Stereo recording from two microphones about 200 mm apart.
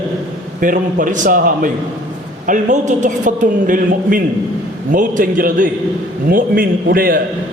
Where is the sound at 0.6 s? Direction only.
40° right (ahead or behind).